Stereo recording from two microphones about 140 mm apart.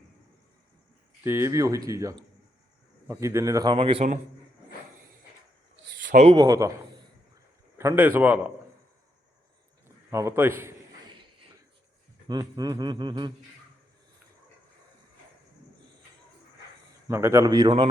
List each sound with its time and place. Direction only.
1.2 s speech: 20° right (ahead or behind)
3.8 s a man's voice: 40° right (ahead or behind)
6.1 s speech: 55° right (ahead or behind)
6.3 s speech: 25° right (ahead or behind)
7.8 s a man's voice: 15° right (ahead or behind)
10.1 s a man's voice: 20° right (ahead or behind)
12.3 s a man's voice: 30° right (ahead or behind)
17.1 s speech: 20° right (ahead or behind)